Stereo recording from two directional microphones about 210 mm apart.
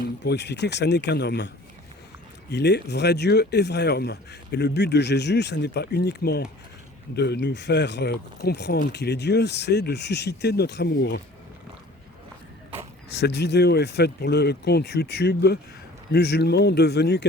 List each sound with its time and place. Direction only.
0.0 s speech: 50° left (ahead or behind)
2.5 s speech: 55° left (ahead or behind)
13.1 s speech: 50° left (ahead or behind)